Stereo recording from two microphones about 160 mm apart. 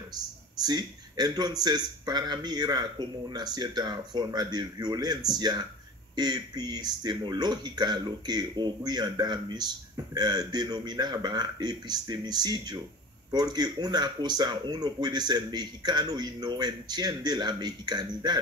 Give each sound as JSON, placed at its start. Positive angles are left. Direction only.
{"t": 0.6, "sound": "speech", "side_deg": -25}